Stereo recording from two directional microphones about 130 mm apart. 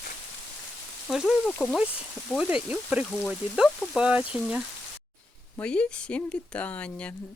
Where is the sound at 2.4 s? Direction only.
10° right (ahead or behind).